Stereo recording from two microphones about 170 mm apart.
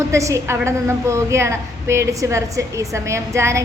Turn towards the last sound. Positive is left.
turn(degrees=-15)  # may be behind; listen again after turning